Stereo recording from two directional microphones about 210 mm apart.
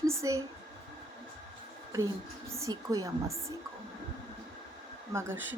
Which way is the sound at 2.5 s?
15° right (ahead or behind).